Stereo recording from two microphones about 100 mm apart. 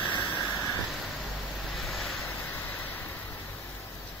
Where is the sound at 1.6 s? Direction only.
Centre (ahead or behind).